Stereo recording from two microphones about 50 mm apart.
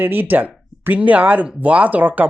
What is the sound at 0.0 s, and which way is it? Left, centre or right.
Speech, right.